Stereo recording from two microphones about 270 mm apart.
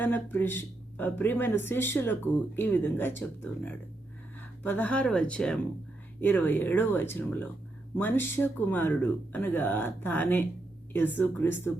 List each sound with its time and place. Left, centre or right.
0.0 s speech: centre